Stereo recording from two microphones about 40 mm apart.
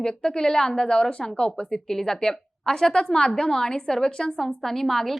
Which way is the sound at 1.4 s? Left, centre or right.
Left.